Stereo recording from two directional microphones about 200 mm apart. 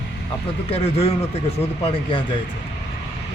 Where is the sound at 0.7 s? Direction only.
30° left (ahead or behind).